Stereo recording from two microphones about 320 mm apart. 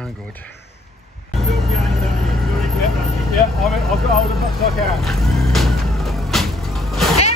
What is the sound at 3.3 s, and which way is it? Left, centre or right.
Speech, centre.